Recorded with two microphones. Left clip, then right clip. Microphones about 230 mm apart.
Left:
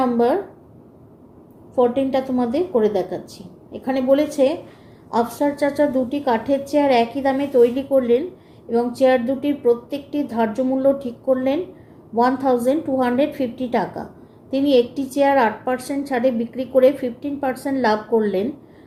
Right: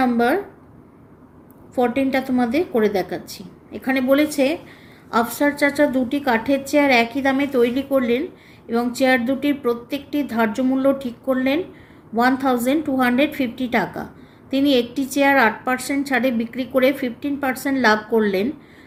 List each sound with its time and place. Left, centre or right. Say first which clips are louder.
0.0 s a woman's voice: even; right
1.7 s a woman's voice: left 2 dB; right